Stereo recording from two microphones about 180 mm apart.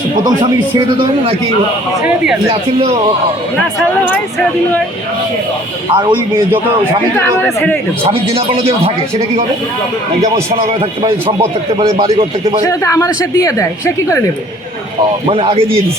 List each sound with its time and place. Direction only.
2.0 s speech: 5° right (ahead or behind)
2.5 s a man's voice: 35° right (ahead or behind)
5.9 s speech: 25° right (ahead or behind)
7.2 s a woman's voice: 5° left (ahead or behind)
8.1 s a man's voice: 30° right (ahead or behind)
10.5 s a man's voice: 30° right (ahead or behind)
11.3 s speech: 20° right (ahead or behind)
11.9 s a man's voice: 35° right (ahead or behind)
12.6 s a woman's voice: 15° left (ahead or behind)
15.3 s a man's voice: 30° right (ahead or behind)